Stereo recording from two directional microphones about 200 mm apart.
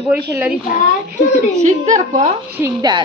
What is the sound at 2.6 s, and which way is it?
Speech, 20° right (ahead or behind).